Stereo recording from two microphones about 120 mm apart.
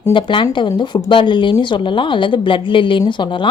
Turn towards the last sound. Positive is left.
turn(degrees=40)  # may be behind; listen again after turning